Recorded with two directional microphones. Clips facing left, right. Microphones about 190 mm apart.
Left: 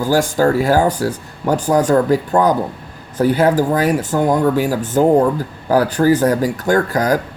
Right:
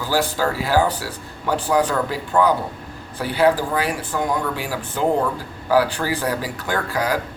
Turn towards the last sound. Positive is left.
turn(degrees=45)  # may be behind; listen again after turning